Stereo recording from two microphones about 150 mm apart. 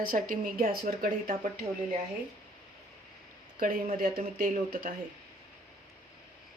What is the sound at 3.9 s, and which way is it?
Speech, 70° right (ahead or behind).